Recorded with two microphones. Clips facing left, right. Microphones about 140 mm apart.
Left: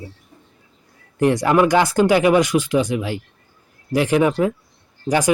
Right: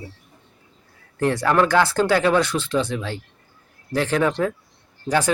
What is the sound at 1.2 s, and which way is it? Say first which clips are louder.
Speech: left 3 dB; 15° left (ahead or behind).